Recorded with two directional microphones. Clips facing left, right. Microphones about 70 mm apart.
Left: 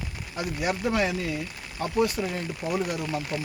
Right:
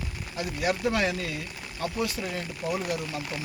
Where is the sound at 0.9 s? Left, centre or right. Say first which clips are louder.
Left 1 dB; centre.